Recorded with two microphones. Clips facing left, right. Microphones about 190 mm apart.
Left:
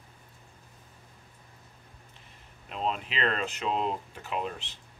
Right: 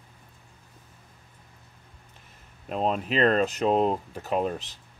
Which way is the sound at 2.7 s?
45° right (ahead or behind).